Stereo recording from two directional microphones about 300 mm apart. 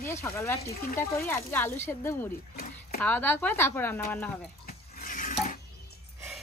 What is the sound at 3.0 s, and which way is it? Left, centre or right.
Speech, centre.